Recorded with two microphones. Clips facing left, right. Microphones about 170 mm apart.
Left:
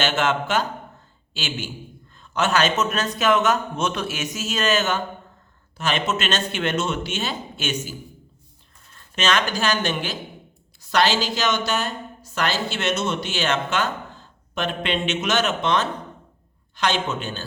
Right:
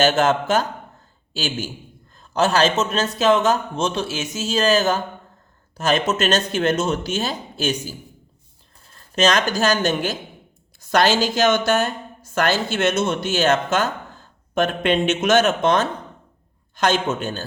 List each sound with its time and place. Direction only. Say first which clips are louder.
0.0 s a man's voice: right 5 dB; 40° right (ahead or behind)
8.9 s a woman's voice: right 4 dB; 40° right (ahead or behind)